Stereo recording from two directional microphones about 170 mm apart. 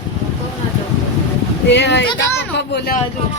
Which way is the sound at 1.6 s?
90° left.